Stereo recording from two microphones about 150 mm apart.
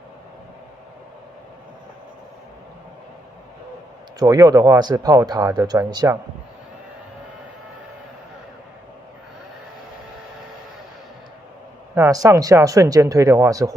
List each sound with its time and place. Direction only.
4.2 s speech: 25° right (ahead or behind)
11.9 s speech: 20° right (ahead or behind)